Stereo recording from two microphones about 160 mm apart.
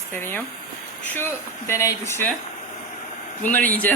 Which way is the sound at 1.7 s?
15° left (ahead or behind).